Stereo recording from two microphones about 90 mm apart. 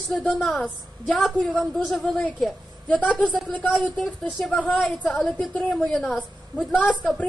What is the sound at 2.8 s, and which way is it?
Speech, 10° left (ahead or behind).